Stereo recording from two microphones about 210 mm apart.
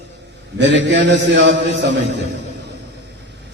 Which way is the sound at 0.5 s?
55° right (ahead or behind).